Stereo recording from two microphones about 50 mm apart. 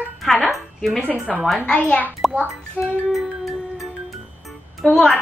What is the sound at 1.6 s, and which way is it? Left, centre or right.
Speech, centre.